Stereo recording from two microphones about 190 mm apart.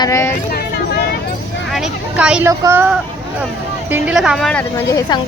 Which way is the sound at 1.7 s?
5° right (ahead or behind).